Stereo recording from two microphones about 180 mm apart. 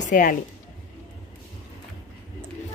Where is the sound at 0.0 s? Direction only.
45° left (ahead or behind).